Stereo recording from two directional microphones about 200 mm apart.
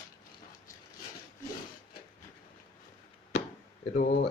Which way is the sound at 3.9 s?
45° left (ahead or behind).